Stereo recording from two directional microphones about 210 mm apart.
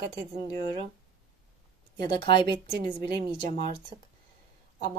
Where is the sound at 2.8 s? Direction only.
40° right (ahead or behind).